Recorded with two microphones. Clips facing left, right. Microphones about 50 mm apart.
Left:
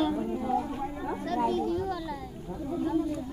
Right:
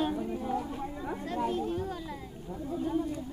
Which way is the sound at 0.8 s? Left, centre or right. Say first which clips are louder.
Left 3 dB; centre.